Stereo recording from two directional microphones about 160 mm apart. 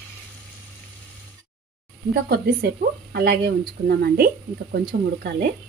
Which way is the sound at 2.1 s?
75° right (ahead or behind).